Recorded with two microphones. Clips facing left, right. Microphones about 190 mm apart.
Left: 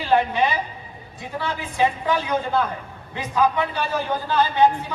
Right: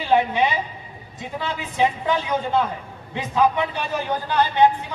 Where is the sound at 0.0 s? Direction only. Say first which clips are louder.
Right 1 dB; 15° right (ahead or behind).